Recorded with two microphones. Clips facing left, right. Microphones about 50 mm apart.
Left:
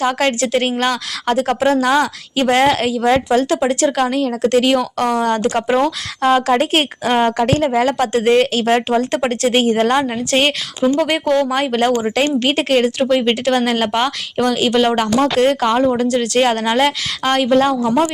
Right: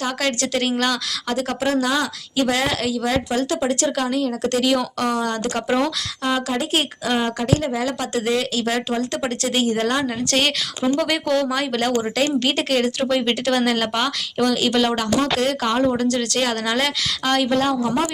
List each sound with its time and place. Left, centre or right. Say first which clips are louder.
0.0 s speech: left 6 dB; left
0.3 s a woman's voice: left 4 dB; left
4.0 s speech: left 5 dB; left
6.2 s a woman's voice: left 9 dB; left
15.0 s speech: left 6 dB; left
15.9 s speech: left 4 dB; centre
16.4 s a woman's voice: left 9 dB; left
17.8 s speech: left 6 dB; centre